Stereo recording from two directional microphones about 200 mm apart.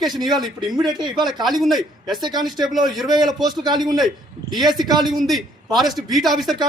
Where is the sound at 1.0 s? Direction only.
20° right (ahead or behind).